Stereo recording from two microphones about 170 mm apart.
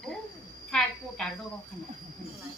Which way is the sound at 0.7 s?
5° left (ahead or behind).